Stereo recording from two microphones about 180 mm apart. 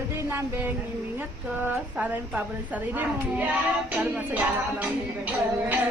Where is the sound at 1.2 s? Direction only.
10° right (ahead or behind).